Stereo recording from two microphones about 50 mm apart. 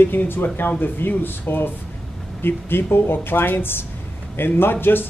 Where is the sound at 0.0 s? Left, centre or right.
Left.